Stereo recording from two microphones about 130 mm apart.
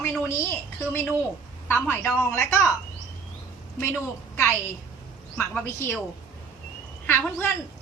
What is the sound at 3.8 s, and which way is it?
A woman's voice, 20° left (ahead or behind).